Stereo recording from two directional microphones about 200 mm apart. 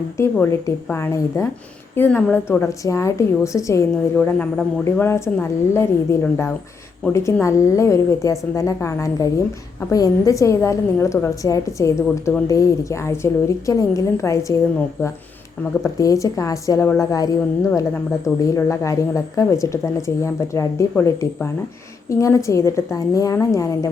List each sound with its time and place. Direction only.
0.2 s a woman's voice: 15° left (ahead or behind)